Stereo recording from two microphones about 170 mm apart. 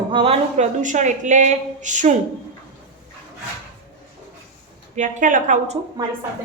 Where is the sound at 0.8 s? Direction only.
45° right (ahead or behind).